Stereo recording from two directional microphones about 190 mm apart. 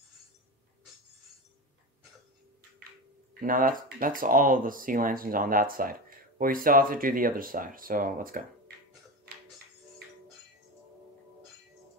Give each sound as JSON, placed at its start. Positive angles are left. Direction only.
{"t": 3.3, "sound": "speech", "side_deg": -45}